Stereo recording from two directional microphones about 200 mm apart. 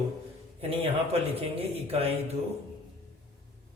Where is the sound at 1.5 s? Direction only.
30° right (ahead or behind).